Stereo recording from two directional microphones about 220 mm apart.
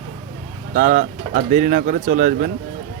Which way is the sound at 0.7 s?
35° right (ahead or behind).